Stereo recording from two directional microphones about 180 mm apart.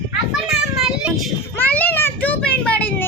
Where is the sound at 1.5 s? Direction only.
10° left (ahead or behind).